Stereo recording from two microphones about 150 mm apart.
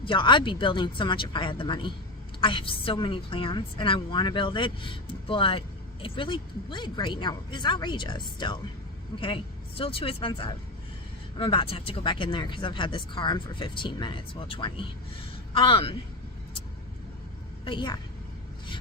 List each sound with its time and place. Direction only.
0.0 s a woman's voice: 35° left (ahead or behind)
17.7 s a woman's voice: 30° left (ahead or behind)